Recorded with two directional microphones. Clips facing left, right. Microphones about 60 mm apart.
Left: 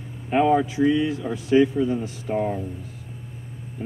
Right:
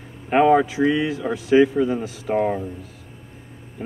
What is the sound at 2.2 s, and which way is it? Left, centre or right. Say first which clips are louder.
Speech: right 5 dB; right.